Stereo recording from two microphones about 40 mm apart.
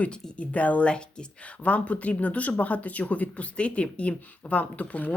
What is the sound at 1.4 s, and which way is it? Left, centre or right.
Speech, left.